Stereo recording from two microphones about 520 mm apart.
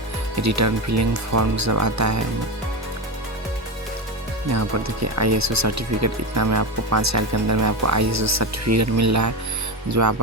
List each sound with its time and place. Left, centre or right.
0.4 s speech: right
4.5 s speech: right